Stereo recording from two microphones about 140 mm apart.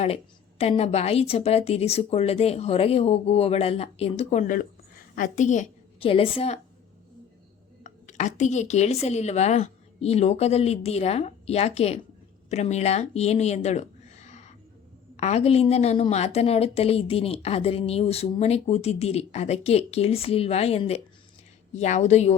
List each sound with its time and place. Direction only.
0.6 s a woman's voice: 45° left (ahead or behind)
6.0 s a woman's voice: 40° left (ahead or behind)
7.9 s a woman's voice: 60° left (ahead or behind)